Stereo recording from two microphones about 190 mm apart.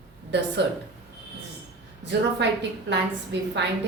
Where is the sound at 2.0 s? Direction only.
65° right (ahead or behind).